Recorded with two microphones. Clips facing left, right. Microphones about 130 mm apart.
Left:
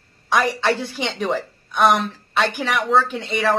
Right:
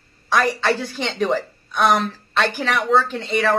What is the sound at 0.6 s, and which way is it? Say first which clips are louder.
Speech: even; 5° left (ahead or behind).